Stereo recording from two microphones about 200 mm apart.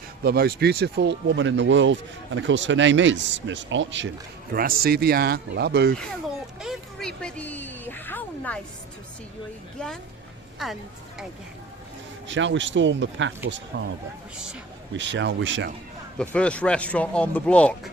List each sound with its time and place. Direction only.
0.2 s speech: 50° right (ahead or behind); by 4.1 s 65° right (ahead or behind)
4.5 s speech: 50° right (ahead or behind)
6.6 s a sound: centre (ahead or behind)
12.3 s speech: 65° right (ahead or behind)
14.9 s speech: 65° right (ahead or behind)
16.1 s speech: 5° left (ahead or behind)